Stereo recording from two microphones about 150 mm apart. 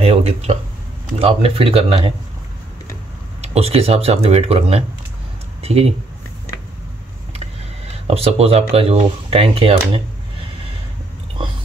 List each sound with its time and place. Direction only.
0.0 s speech: 45° right (ahead or behind)
3.3 s speech: 40° right (ahead or behind)
8.1 s speech: 40° right (ahead or behind)